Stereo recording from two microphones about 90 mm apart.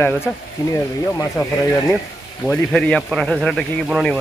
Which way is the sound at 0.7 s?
40° left (ahead or behind).